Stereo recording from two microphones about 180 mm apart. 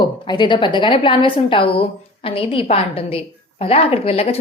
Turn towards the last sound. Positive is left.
turn(degrees=35)  # may be behind; listen again after turning